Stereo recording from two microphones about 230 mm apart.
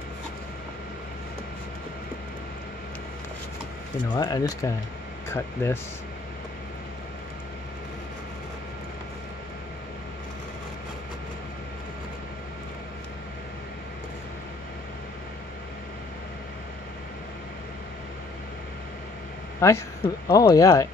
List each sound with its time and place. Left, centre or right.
4.1 s speech: centre
19.6 s speech: centre